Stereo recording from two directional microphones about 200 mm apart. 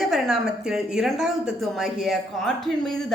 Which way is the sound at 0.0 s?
Centre (ahead or behind).